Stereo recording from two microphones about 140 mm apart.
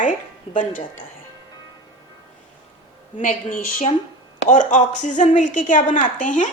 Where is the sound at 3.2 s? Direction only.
60° left (ahead or behind).